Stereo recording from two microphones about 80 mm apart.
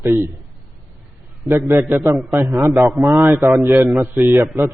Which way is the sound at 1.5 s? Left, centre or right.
Right.